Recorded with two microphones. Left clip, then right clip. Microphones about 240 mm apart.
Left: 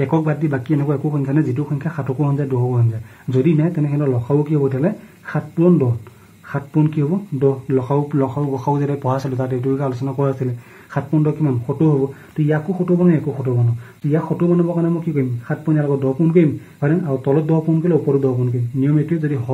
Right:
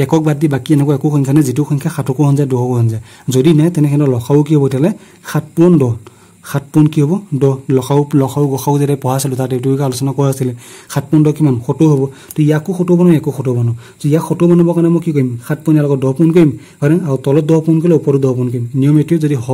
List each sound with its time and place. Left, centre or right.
0.0 s speech: right